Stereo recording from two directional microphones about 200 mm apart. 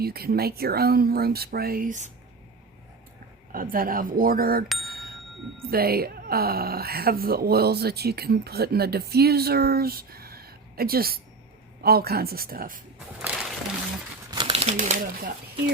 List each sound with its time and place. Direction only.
0.0 s speech: 50° right (ahead or behind)
3.5 s speech: 45° right (ahead or behind)
4.8 s bicycle bell: 50° right (ahead or behind)
5.7 s speech: 50° right (ahead or behind)
13.2 s a sound: 5° right (ahead or behind)
14.3 s speech: 25° right (ahead or behind); by 15.3 s 40° right (ahead or behind)